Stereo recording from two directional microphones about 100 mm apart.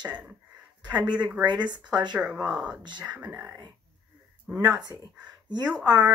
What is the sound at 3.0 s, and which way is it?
Speech, 15° right (ahead or behind).